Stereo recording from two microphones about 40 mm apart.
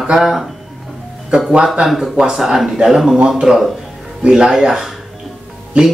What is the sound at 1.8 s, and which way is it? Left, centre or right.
Speech, centre.